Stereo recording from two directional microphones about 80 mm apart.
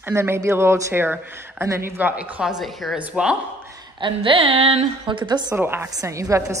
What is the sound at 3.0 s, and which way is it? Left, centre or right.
Speech, centre.